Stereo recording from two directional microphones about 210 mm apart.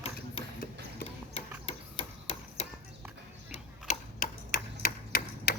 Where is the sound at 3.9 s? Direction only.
40° left (ahead or behind).